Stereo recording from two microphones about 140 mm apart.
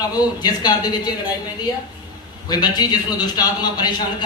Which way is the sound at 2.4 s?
30° left (ahead or behind).